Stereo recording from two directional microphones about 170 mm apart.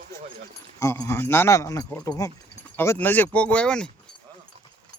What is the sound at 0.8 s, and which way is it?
Speech, 15° left (ahead or behind).